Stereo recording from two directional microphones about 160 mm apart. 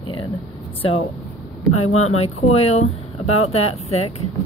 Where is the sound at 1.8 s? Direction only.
40° left (ahead or behind).